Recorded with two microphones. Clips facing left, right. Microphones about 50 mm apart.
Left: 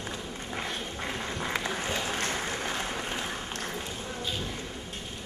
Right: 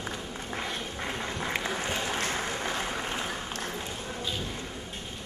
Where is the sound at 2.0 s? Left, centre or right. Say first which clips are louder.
Right 1 dB; right.